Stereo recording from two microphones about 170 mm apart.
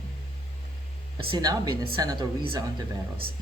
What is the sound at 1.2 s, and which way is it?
Speech, 30° right (ahead or behind).